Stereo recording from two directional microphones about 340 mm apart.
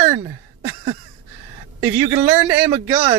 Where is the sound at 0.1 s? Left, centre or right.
Centre.